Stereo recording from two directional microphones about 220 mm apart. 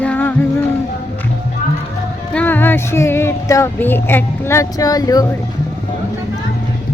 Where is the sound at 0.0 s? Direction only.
5° left (ahead or behind).